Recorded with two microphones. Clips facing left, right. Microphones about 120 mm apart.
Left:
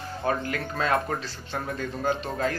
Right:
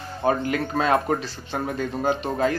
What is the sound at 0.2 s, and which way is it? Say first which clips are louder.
Speech: right 6 dB; 20° right (ahead or behind).